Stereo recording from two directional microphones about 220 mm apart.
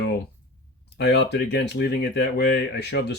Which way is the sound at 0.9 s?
50° left (ahead or behind).